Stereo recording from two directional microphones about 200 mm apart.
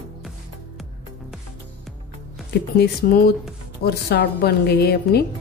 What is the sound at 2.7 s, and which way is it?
Speech, 50° left (ahead or behind).